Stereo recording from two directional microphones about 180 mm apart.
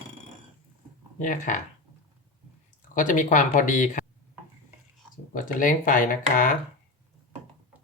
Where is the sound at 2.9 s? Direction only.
45° left (ahead or behind).